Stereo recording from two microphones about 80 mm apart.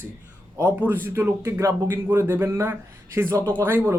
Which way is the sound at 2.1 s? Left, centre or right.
Right.